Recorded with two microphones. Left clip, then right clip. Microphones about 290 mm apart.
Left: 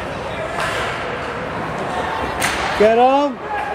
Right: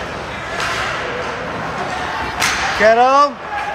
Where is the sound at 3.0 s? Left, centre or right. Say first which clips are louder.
Right 3 dB; right.